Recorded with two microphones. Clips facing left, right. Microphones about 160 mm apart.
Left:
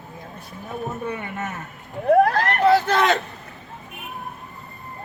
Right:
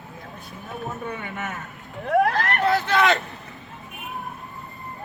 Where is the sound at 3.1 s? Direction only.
Centre (ahead or behind).